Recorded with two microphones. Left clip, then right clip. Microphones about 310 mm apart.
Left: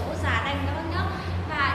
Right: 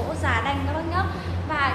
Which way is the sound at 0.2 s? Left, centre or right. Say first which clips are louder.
Right 2 dB; centre.